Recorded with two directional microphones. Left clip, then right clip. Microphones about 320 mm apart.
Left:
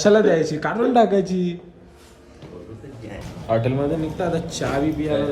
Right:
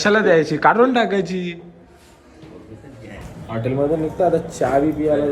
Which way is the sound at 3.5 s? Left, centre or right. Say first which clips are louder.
Left 4 dB; centre.